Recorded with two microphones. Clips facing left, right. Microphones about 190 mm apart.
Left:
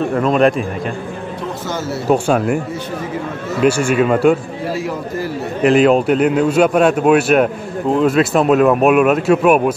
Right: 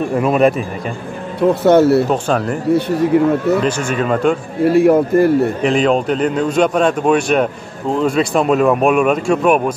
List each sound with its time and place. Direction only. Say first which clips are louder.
0.2 s speech: right 1 dB; 5° right (ahead or behind)
1.5 s speech: right 15 dB; 60° right (ahead or behind)
2.0 s a man's voice: left 2 dB; 10° left (ahead or behind)
2.7 s speech: right 11 dB; 65° right (ahead or behind)
3.6 s a man's voice: left 4 dB; 10° left (ahead or behind)
4.6 s speech: right 12 dB; 60° right (ahead or behind)
5.6 s a man's voice: left 3 dB; 5° left (ahead or behind)